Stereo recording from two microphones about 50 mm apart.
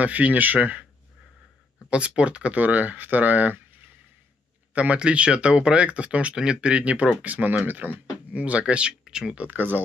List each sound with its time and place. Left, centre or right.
0.0 s speech: right
1.9 s speech: right
4.7 s speech: right
8.3 s speech: right
9.5 s speech: right